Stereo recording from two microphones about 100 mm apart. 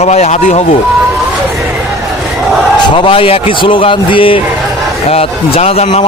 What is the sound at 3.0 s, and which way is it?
A man's voice, 65° left (ahead or behind).